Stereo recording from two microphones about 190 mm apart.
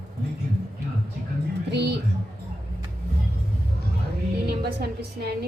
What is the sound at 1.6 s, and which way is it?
Speech, 60° right (ahead or behind).